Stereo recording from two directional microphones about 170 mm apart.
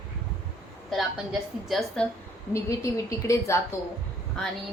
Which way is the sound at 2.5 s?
20° left (ahead or behind).